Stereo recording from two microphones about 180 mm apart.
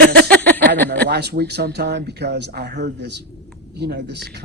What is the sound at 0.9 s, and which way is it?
A man's voice, 70° right (ahead or behind).